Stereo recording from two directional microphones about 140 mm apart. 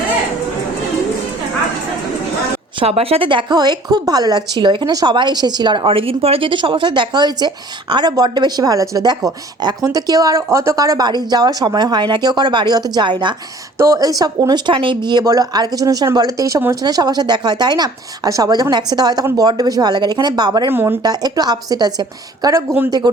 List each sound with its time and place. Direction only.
2.7 s speech: 45° right (ahead or behind)
13.7 s speech: 25° right (ahead or behind)
20.7 s speech: 15° right (ahead or behind)
21.0 s speech: 30° right (ahead or behind)